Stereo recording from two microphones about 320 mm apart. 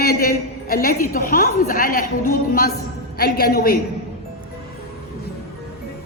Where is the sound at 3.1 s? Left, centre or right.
Left.